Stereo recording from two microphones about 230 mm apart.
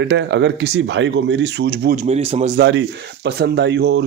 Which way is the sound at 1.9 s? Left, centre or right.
Right.